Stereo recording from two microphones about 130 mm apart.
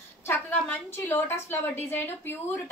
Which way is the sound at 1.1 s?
15° left (ahead or behind).